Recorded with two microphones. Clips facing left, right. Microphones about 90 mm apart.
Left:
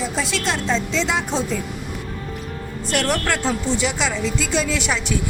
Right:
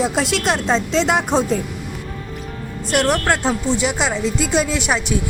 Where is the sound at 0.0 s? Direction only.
70° right (ahead or behind).